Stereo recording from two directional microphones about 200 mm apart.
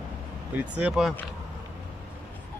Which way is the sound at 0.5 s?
5° right (ahead or behind).